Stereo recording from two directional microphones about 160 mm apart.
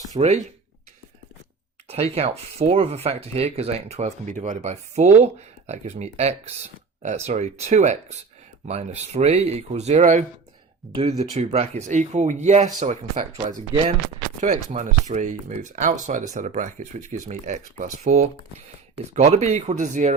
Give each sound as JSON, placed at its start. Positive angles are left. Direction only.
{"t": 0.1, "sound": "speech", "side_deg": -45}
{"t": 1.9, "sound": "speech", "side_deg": -40}